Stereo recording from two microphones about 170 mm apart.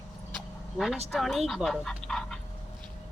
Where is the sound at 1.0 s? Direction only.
Centre (ahead or behind).